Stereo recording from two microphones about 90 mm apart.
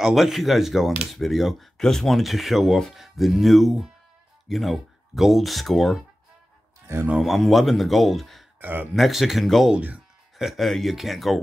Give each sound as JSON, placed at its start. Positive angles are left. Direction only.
{"t": 0.0, "sound": "speech", "side_deg": 0}
{"t": 7.1, "sound": "speech", "side_deg": -5}
{"t": 8.5, "sound": "speech", "side_deg": -20}
{"t": 8.9, "sound": "speech", "side_deg": 0}
{"t": 9.8, "sound": "speech", "side_deg": -15}
{"t": 10.3, "sound": "speech", "side_deg": 0}